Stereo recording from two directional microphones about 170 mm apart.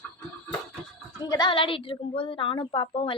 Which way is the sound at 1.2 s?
25° left (ahead or behind).